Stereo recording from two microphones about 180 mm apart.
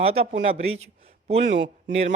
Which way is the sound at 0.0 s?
35° right (ahead or behind).